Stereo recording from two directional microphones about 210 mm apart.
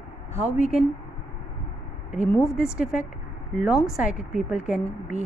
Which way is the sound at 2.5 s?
5° right (ahead or behind).